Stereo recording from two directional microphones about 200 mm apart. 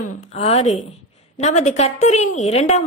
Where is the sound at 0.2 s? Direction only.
35° left (ahead or behind).